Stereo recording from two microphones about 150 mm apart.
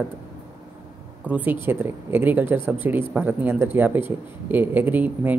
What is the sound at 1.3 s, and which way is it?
Speech, 10° right (ahead or behind).